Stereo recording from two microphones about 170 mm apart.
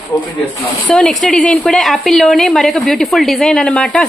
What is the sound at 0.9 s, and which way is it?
Speech, 5° left (ahead or behind).